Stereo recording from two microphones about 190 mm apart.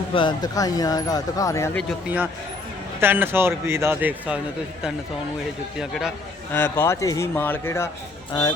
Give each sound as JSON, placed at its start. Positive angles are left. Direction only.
{"t": 0.1, "sound": "speech", "side_deg": 25}
{"t": 1.9, "sound": "a man's voice", "side_deg": -10}
{"t": 5.8, "sound": "a man's voice", "side_deg": 0}
{"t": 6.5, "sound": "a man's voice", "side_deg": 10}